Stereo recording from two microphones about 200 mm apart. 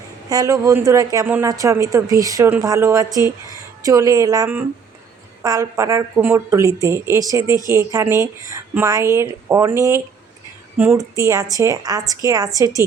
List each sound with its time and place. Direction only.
0.3 s a woman's voice: 20° right (ahead or behind)